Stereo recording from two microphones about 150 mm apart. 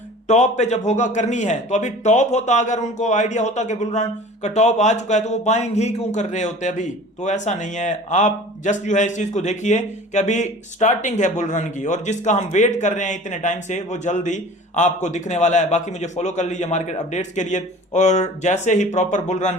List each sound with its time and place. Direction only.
0.3 s a man's voice: 50° left (ahead or behind)